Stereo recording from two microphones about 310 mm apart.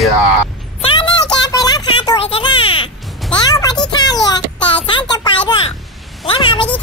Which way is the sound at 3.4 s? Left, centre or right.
Centre.